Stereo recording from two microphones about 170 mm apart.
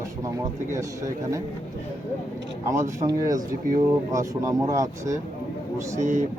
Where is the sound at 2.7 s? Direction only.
15° right (ahead or behind).